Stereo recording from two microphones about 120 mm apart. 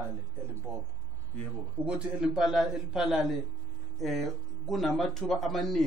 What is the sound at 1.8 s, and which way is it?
Speech, 10° right (ahead or behind).